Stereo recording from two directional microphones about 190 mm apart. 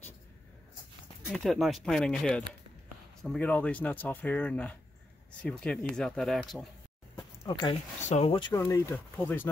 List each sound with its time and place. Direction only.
1.3 s speech: centre (ahead or behind)
7.2 s a sound: 25° left (ahead or behind)
8.1 s speech: 30° left (ahead or behind); by 9.5 s 10° left (ahead or behind)